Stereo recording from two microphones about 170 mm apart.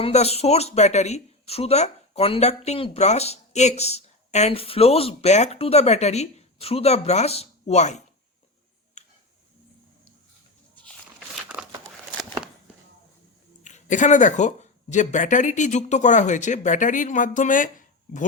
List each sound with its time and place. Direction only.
0.0 s speech: 40° left (ahead or behind)
13.7 s speech: 45° left (ahead or behind)